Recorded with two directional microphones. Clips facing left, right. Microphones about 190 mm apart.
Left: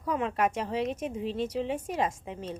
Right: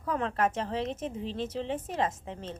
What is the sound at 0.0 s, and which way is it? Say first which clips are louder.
A woman's voice: left 1 dB; 10° left (ahead or behind).